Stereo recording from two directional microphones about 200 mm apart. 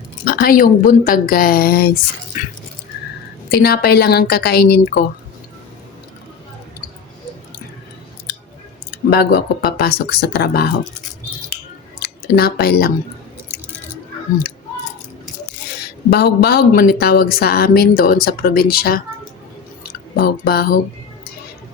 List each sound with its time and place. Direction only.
0.3 s speech: 45° left (ahead or behind)
2.3 s dog: 40° left (ahead or behind)
3.5 s speech: 50° left (ahead or behind)
9.0 s speech: 50° left (ahead or behind)
11.9 s speech: 50° left (ahead or behind)
15.8 s speech: 55° left (ahead or behind)
20.1 s speech: 50° left (ahead or behind)